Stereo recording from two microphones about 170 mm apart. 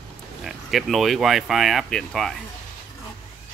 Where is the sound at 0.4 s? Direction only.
Centre (ahead or behind).